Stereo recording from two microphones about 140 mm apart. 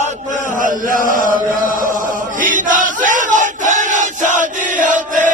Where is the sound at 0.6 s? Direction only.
80° right.